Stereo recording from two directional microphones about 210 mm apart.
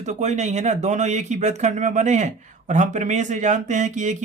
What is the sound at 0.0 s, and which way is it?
Speech, 35° right (ahead or behind).